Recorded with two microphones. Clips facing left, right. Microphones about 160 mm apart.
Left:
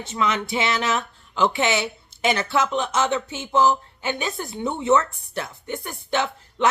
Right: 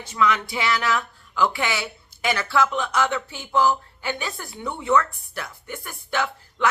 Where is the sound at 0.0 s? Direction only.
25° left (ahead or behind).